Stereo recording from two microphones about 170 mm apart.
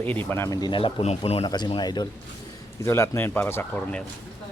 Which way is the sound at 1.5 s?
25° left (ahead or behind).